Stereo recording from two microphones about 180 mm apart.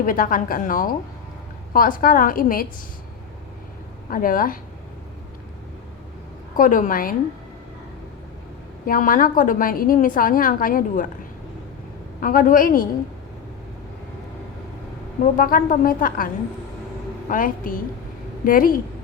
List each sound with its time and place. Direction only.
0.0 s a woman's voice: 50° left (ahead or behind)
4.1 s a woman's voice: 50° left (ahead or behind)
6.6 s a woman's voice: 50° left (ahead or behind)
8.9 s a woman's voice: 50° left (ahead or behind)
12.2 s a woman's voice: 50° left (ahead or behind)
15.4 s a woman's voice: 50° left (ahead or behind)